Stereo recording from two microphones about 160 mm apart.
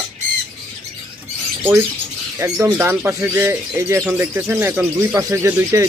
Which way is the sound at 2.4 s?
15° right (ahead or behind).